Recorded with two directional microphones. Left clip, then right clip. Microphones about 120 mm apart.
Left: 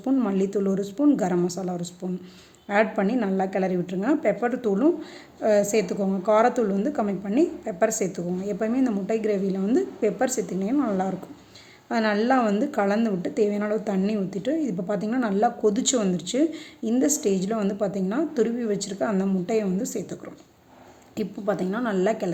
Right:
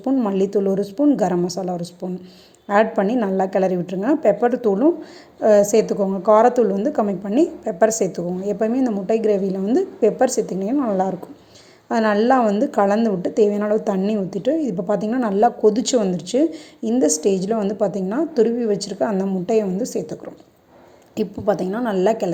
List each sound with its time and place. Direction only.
0.0 s a woman's voice: 20° right (ahead or behind)
21.2 s a woman's voice: 25° right (ahead or behind)